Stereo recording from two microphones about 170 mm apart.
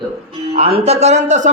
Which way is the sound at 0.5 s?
35° right (ahead or behind).